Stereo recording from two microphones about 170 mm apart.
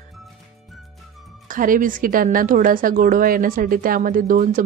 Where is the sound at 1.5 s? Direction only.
55° right (ahead or behind).